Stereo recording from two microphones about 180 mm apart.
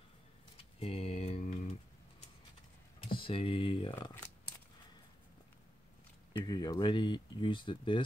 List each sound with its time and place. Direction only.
0.7 s a sound: 35° left (ahead or behind)
3.1 s speech: 30° left (ahead or behind)
6.3 s speech: 25° left (ahead or behind)